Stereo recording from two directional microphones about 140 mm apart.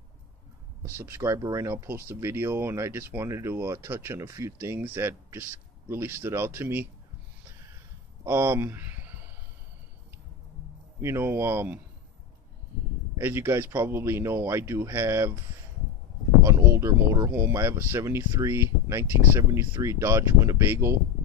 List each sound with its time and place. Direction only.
0.8 s speech: 20° right (ahead or behind)
8.3 s speech: 20° right (ahead or behind)
11.0 s speech: 20° right (ahead or behind)
13.1 s speech: 20° right (ahead or behind)
16.4 s speech: 20° right (ahead or behind)